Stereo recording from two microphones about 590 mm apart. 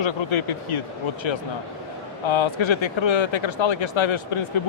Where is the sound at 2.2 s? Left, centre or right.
Left.